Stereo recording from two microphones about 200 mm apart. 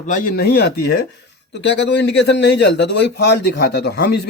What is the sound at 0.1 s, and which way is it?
A man's voice, 45° left (ahead or behind).